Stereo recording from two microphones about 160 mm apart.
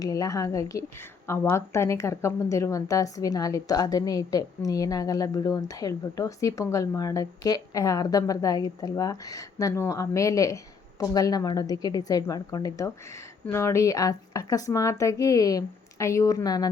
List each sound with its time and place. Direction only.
0.0 s a woman's voice: 20° left (ahead or behind)